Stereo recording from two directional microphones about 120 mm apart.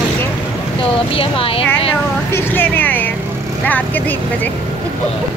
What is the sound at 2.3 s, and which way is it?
Speech, 20° left (ahead or behind).